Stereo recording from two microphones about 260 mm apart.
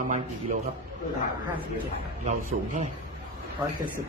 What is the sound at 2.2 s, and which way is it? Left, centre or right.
Speech, right.